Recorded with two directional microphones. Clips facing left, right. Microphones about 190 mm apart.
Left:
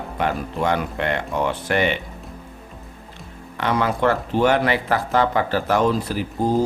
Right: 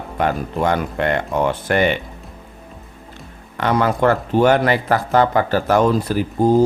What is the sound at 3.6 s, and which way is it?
Speech, 45° right (ahead or behind).